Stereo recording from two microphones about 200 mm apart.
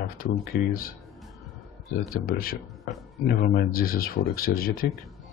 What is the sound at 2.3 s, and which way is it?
Speech, 45° left (ahead or behind).